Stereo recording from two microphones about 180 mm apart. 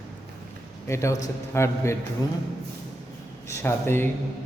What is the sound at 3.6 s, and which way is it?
Speech, 15° left (ahead or behind).